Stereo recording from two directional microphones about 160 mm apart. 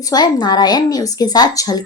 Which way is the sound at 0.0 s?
25° left (ahead or behind).